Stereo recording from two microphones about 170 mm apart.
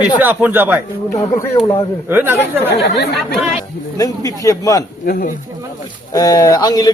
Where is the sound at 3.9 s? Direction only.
20° left (ahead or behind).